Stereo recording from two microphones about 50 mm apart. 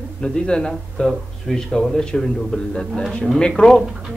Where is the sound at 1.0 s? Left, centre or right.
Centre.